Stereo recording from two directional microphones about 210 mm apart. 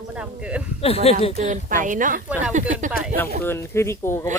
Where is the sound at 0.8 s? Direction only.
30° left (ahead or behind).